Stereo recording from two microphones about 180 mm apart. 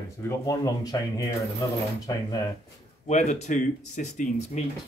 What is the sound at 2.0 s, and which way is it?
Speech, 20° left (ahead or behind).